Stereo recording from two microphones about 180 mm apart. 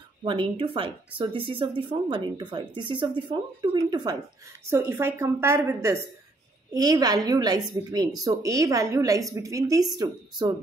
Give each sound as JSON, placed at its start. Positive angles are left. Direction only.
{"t": 0.2, "sound": "a woman's voice", "side_deg": -30}